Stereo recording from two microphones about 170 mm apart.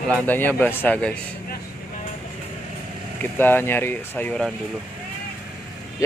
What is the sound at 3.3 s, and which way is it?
Speech, 10° left (ahead or behind).